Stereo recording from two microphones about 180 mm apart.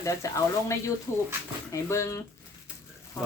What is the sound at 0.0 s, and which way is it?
Speech, 15° left (ahead or behind).